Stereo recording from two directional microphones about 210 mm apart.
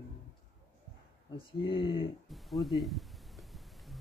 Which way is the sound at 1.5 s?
25° left (ahead or behind).